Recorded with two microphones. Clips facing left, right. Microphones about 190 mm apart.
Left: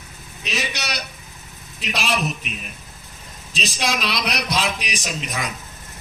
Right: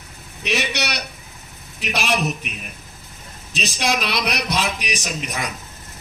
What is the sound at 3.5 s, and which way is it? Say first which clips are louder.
Speech: right 2 dB; 60° right (ahead or behind).